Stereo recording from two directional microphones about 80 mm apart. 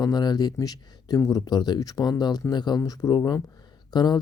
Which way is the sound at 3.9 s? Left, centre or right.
Left.